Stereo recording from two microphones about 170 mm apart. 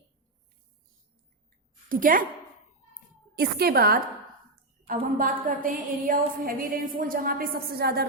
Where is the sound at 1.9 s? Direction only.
55° right (ahead or behind).